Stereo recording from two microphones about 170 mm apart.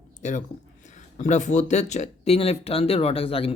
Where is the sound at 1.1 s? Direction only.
45° left (ahead or behind).